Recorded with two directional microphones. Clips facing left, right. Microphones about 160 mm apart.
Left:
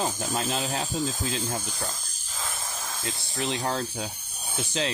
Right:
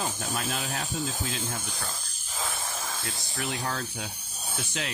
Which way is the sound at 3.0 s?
25° left (ahead or behind).